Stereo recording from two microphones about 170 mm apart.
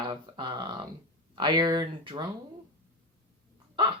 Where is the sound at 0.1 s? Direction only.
25° right (ahead or behind).